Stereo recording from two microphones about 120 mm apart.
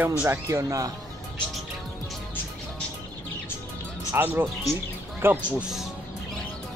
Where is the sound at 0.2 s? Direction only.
25° right (ahead or behind).